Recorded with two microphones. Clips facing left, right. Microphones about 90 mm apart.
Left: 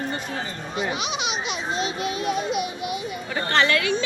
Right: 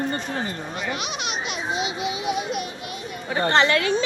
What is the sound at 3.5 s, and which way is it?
Speech, 25° right (ahead or behind).